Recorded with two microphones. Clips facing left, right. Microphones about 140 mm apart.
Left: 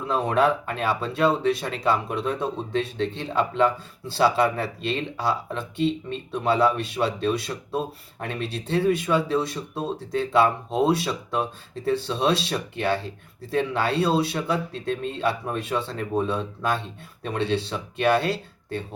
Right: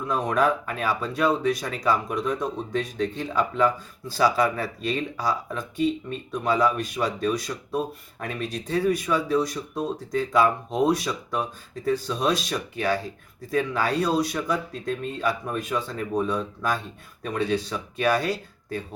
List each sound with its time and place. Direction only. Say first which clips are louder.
0.1 s a man's voice: left 2 dB; 25° left (ahead or behind)